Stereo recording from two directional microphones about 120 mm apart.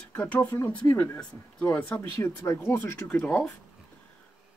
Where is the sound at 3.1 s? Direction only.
10° left (ahead or behind).